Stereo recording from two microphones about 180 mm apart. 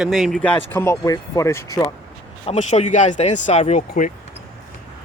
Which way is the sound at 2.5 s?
40° left (ahead or behind).